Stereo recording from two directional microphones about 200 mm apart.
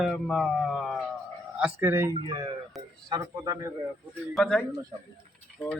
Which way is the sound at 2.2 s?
25° right (ahead or behind).